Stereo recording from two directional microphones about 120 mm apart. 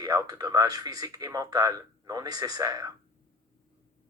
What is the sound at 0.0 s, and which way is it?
Speech, 30° right (ahead or behind).